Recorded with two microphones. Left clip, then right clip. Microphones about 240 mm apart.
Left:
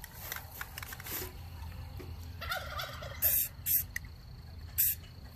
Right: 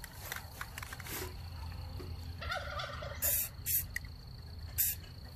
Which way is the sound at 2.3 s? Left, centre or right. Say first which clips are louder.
Left 1 dB; left.